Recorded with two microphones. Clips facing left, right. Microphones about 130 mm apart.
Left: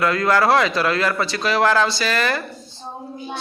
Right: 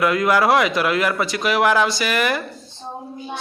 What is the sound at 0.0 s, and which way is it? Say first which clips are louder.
A child's voice: right 1 dB; 15° right (ahead or behind).